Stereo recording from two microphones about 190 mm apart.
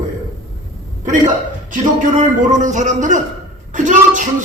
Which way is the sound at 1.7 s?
45° right (ahead or behind).